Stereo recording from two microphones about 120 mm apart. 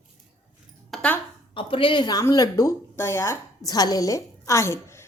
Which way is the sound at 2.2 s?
25° left (ahead or behind).